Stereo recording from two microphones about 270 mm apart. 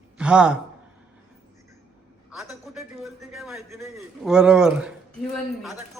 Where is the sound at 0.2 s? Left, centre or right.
Centre.